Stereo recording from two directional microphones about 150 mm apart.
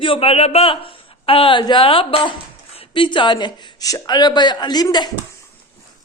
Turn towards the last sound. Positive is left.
turn(degrees=30)  # may be behind; listen again after turning